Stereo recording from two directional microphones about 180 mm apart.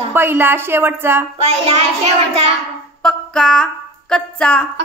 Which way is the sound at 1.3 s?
35° right (ahead or behind).